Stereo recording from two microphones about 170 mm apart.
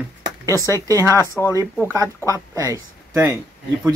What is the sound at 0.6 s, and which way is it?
Speech, 20° right (ahead or behind).